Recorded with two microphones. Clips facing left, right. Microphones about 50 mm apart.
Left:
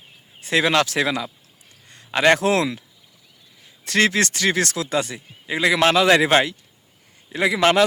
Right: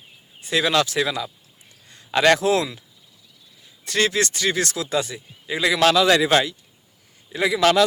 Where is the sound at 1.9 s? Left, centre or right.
Left.